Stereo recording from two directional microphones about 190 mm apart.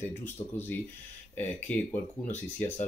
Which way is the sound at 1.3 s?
10° left (ahead or behind).